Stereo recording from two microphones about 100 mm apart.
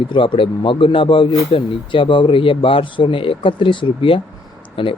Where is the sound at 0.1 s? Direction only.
55° left (ahead or behind).